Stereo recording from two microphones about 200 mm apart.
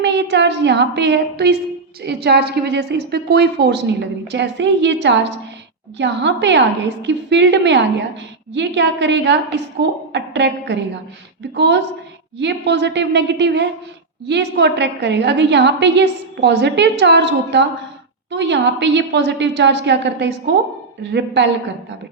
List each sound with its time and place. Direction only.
0.0 s a woman's voice: 60° right (ahead or behind)